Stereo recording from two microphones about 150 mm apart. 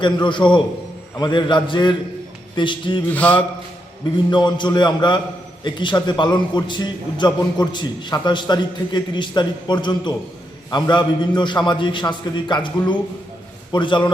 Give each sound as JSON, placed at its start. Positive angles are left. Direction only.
{"t": 0.0, "sound": "a man's voice", "side_deg": 30}
{"t": 3.1, "sound": "speech", "side_deg": 10}
{"t": 4.3, "sound": "a man's voice", "side_deg": 30}